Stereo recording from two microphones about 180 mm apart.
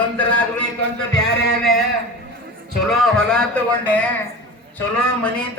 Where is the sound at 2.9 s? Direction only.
5° left (ahead or behind).